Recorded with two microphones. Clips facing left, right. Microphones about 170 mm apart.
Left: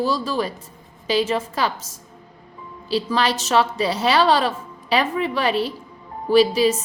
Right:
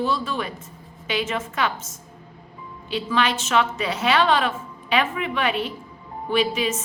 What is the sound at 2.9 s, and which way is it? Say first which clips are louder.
A woman's voice: left 2 dB; 35° left (ahead or behind).